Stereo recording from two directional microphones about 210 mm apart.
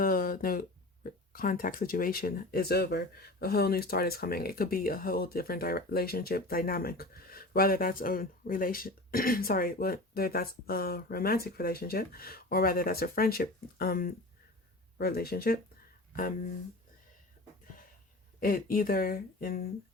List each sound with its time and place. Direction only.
0.0 s a sound: 45° left (ahead or behind)
1.3 s speech: 40° left (ahead or behind)
18.3 s speech: 40° left (ahead or behind)